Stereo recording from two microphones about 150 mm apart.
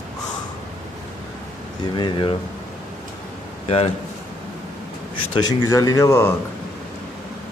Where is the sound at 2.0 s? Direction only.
35° left (ahead or behind).